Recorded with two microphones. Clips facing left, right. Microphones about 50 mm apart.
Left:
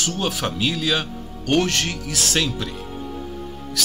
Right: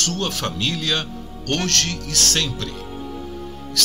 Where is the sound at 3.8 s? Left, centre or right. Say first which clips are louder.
Right 2 dB; centre.